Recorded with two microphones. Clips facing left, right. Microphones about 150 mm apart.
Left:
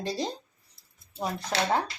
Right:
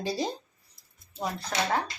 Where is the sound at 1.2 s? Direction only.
20° left (ahead or behind).